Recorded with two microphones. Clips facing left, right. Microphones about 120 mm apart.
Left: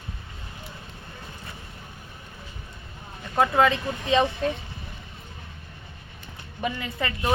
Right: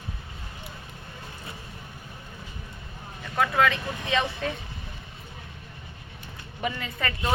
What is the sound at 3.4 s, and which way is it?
Speech, 25° left (ahead or behind).